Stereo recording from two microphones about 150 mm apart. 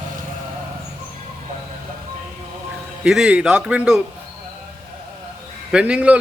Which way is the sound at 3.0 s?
5° right (ahead or behind).